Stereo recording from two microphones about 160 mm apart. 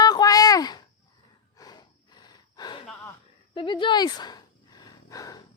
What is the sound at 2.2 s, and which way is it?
Gasp, 25° left (ahead or behind).